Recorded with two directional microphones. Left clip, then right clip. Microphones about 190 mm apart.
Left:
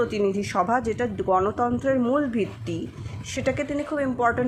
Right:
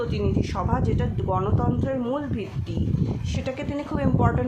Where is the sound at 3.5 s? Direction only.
10° left (ahead or behind).